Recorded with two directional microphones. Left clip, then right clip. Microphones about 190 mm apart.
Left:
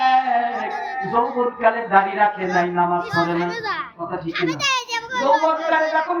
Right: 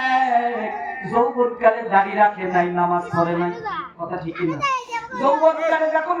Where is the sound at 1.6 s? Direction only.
20° left (ahead or behind).